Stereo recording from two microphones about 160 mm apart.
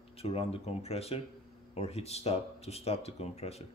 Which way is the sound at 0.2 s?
40° left (ahead or behind).